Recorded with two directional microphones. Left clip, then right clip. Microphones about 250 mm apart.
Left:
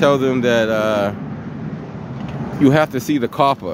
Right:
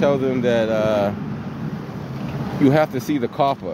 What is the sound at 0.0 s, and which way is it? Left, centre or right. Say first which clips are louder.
Speech: left 4 dB; centre.